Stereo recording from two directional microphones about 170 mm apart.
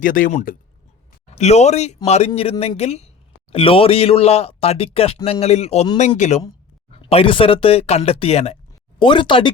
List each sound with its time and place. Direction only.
0.0 s speech: 50° left (ahead or behind); by 9.5 s 30° left (ahead or behind)